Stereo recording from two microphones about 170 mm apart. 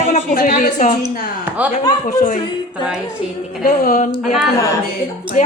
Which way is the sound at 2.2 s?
45° left (ahead or behind).